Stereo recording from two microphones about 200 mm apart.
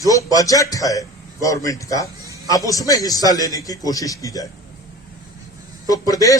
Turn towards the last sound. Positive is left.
turn(degrees=15)  # may be behind; listen again after turning